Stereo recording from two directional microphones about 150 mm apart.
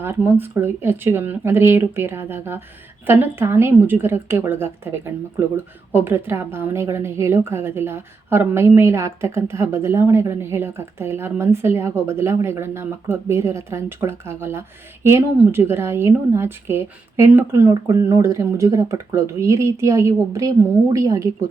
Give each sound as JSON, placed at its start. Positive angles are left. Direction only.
{"t": 0.0, "sound": "a woman's voice", "side_deg": -15}